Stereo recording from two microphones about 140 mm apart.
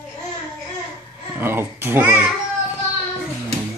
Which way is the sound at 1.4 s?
15° right (ahead or behind).